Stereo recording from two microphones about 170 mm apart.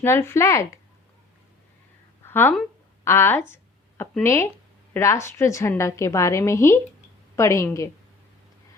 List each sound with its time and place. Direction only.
0.0 s a woman's voice: 15° left (ahead or behind)
2.2 s speech: 10° left (ahead or behind)
3.5 s a sound: 15° left (ahead or behind)
4.2 s a woman's voice: 15° left (ahead or behind)